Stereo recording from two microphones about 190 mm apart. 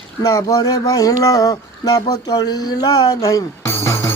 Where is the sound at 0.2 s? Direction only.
20° left (ahead or behind).